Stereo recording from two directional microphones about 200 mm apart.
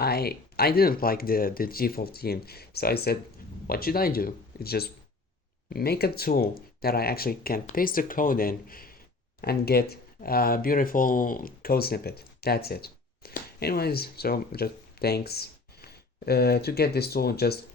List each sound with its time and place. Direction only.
0.0 s speech: 50° left (ahead or behind)